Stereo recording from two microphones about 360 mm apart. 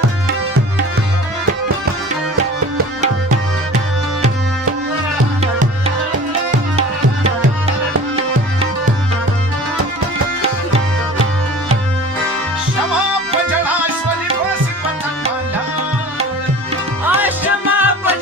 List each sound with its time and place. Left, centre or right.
6.8 s music: centre
13.5 s music: centre
17.0 s music: centre